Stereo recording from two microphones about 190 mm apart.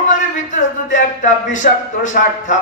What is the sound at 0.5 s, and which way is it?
A man's voice, 40° left (ahead or behind).